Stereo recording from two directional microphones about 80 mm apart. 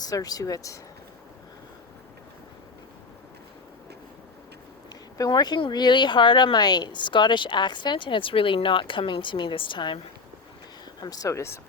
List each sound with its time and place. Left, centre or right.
0.0 s speech: left
5.1 s speech: left
11.0 s speech: left